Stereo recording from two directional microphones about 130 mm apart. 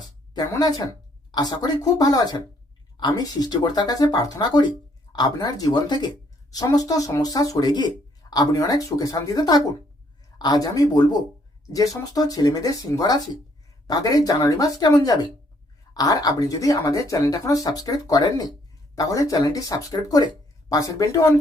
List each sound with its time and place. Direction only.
0.3 s speech: 30° left (ahead or behind)